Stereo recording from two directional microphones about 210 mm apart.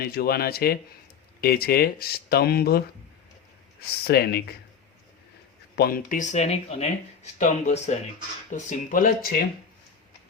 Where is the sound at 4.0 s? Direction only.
50° left (ahead or behind).